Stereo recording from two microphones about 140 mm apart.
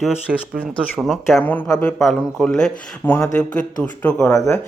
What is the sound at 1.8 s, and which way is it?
Speech, 5° left (ahead or behind).